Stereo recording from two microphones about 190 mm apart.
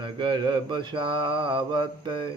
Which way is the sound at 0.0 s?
25° right (ahead or behind).